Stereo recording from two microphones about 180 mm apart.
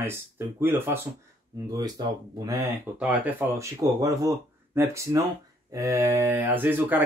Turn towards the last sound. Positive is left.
turn(degrees=-10)  # may be behind; listen again after turning